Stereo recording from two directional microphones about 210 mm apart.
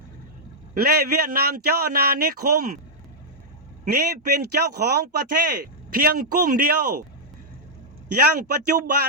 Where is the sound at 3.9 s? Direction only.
50° right (ahead or behind).